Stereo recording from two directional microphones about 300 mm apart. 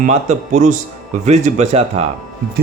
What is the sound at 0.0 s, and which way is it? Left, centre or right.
Speech, right.